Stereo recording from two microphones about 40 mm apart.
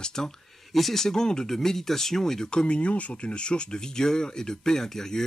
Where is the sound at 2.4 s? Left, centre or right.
Left.